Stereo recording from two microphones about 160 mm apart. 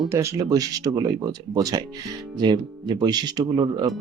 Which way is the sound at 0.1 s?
15° right (ahead or behind).